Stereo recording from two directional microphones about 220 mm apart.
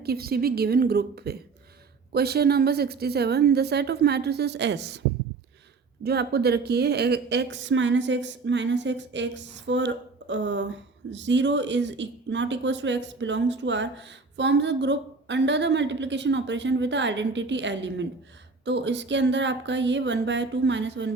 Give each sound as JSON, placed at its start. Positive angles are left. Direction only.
{"t": 0.0, "sound": "a woman's voice", "side_deg": -45}
{"t": 6.0, "sound": "a woman's voice", "side_deg": -45}